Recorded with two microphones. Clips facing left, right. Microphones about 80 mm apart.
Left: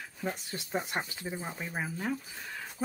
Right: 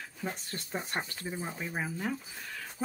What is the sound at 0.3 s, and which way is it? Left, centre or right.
Speech, centre.